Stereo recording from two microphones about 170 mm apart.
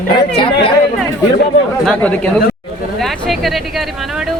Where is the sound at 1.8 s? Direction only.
5° left (ahead or behind).